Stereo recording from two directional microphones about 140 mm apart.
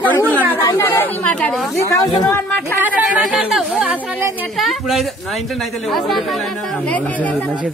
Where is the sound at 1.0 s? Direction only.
10° left (ahead or behind).